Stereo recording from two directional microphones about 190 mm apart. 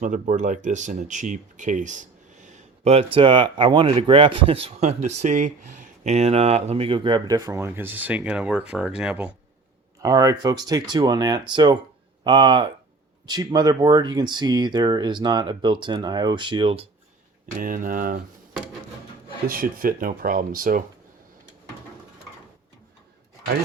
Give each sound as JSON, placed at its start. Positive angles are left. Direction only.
{"t": 0.0, "sound": "speech", "side_deg": -40}
{"t": 10.0, "sound": "speech", "side_deg": -15}
{"t": 17.6, "sound": "speech", "side_deg": -45}
{"t": 19.5, "sound": "speech", "side_deg": -50}